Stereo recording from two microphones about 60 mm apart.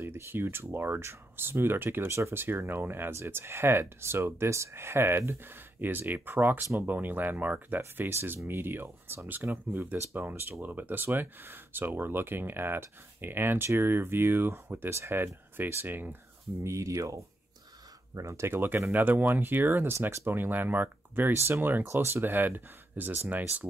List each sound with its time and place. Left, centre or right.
0.0 s speech: right
2.4 s speech: right
8.1 s speech: right
16.6 s speech: right
18.6 s speech: right